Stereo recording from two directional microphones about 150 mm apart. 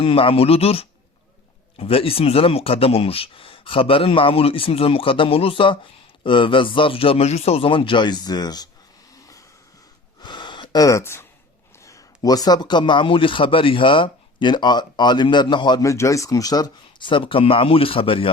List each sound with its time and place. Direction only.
0.0 s speech: 40° left (ahead or behind)
10.2 s gasp: 30° left (ahead or behind)
11.8 s speech: 20° left (ahead or behind); by 18.3 s 35° left (ahead or behind)